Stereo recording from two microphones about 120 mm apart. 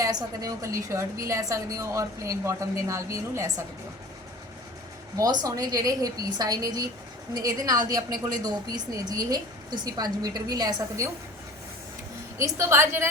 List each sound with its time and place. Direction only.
0.0 s a woman's voice: 30° right (ahead or behind)
5.1 s a woman's voice: 30° right (ahead or behind)
12.4 s a woman's voice: 20° right (ahead or behind)